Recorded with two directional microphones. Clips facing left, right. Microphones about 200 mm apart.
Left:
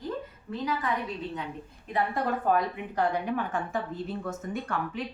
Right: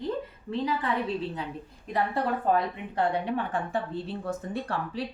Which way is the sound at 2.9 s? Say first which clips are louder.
Right 1 dB; 30° right (ahead or behind).